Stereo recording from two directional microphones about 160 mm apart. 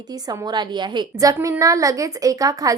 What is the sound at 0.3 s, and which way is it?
A woman's voice, 25° right (ahead or behind).